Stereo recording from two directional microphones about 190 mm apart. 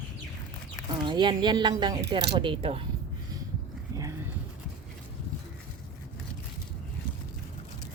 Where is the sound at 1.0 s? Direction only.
25° right (ahead or behind).